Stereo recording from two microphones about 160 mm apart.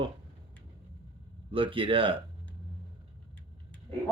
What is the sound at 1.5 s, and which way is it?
Speech, 35° right (ahead or behind).